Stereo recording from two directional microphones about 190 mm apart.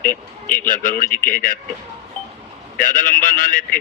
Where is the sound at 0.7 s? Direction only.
45° left (ahead or behind).